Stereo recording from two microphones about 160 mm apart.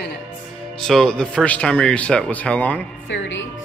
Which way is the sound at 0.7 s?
5° left (ahead or behind).